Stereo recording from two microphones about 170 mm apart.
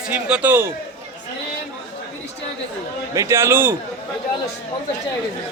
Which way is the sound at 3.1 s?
15° right (ahead or behind).